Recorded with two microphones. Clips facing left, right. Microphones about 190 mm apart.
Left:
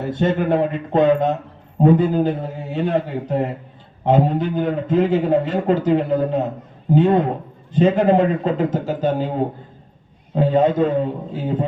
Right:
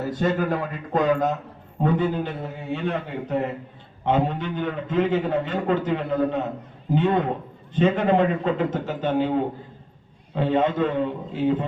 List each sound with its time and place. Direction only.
0.1 s a man's voice: 25° left (ahead or behind)
10.3 s a man's voice: 40° left (ahead or behind)